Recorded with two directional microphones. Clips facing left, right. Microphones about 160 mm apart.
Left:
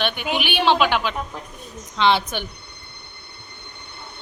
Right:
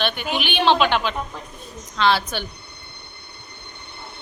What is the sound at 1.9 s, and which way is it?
Speech, 20° left (ahead or behind).